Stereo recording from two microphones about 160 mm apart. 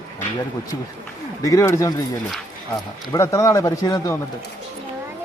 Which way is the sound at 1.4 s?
20° left (ahead or behind).